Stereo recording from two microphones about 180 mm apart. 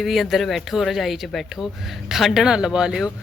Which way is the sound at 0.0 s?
Centre (ahead or behind).